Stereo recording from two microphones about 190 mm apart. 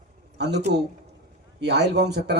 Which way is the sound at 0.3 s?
60° right (ahead or behind).